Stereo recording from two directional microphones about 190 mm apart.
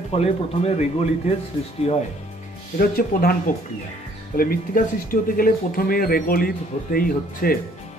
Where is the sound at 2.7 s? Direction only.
50° left (ahead or behind).